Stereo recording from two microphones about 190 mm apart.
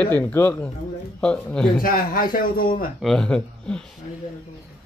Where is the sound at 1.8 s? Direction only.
50° left (ahead or behind).